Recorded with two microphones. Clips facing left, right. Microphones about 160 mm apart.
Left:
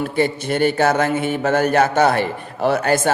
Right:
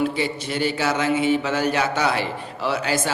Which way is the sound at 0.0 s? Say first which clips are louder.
Left 4 dB; 50° left (ahead or behind).